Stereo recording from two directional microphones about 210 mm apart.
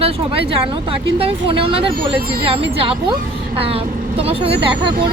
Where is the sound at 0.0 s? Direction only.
25° right (ahead or behind).